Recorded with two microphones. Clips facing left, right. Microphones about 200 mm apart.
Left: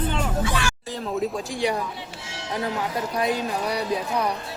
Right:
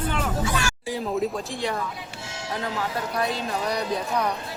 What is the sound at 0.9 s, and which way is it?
Speech, centre (ahead or behind).